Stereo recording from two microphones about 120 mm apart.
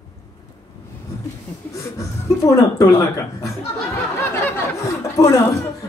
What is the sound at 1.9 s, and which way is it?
Speech, 25° left (ahead or behind).